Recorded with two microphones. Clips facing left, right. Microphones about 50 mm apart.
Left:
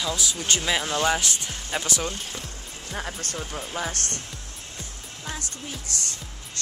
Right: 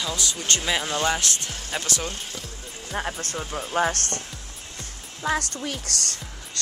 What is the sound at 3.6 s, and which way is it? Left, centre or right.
Speech, right.